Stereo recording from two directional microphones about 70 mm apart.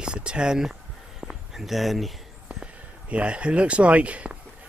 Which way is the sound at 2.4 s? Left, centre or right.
Centre.